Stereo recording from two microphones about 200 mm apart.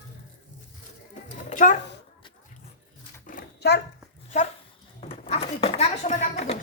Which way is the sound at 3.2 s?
50° left (ahead or behind).